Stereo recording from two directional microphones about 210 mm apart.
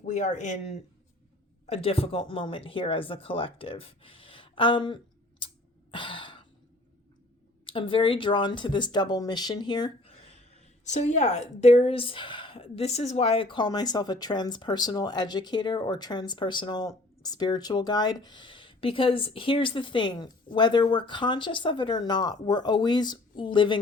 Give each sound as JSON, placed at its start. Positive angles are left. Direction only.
{"t": 0.0, "sound": "speech", "side_deg": 35}
{"t": 5.9, "sound": "cough", "side_deg": 25}
{"t": 7.6, "sound": "speech", "side_deg": 25}